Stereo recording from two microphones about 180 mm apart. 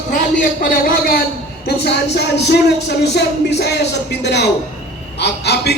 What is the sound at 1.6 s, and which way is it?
Speech, 65° left (ahead or behind).